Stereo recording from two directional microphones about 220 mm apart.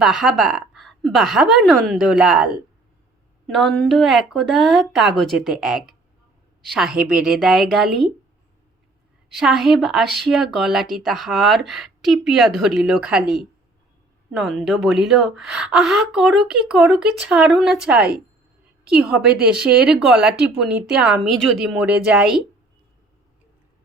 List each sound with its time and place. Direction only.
0.0 s speech: centre (ahead or behind)
9.4 s speech: centre (ahead or behind)